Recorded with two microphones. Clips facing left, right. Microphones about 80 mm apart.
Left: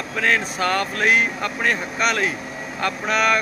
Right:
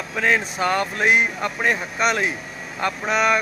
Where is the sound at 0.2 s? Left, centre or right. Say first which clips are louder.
Even; centre.